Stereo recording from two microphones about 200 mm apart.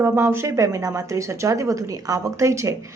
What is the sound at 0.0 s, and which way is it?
A woman's voice, 10° right (ahead or behind).